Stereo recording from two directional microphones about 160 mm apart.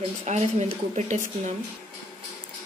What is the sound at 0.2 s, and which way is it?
A woman's voice, 45° right (ahead or behind).